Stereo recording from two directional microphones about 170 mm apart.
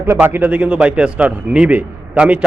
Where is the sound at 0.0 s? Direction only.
15° right (ahead or behind).